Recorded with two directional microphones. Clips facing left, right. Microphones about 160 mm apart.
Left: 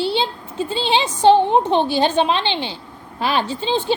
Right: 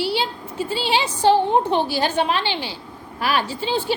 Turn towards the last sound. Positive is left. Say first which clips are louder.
# left 2 dB
turn(degrees=25)  # may be behind; listen again after turning